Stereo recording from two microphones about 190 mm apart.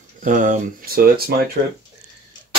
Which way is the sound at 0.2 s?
45° right (ahead or behind).